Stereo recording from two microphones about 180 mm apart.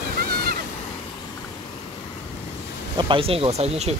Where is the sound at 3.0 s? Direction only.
30° right (ahead or behind).